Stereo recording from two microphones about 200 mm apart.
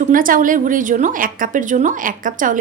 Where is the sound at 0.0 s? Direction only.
45° right (ahead or behind).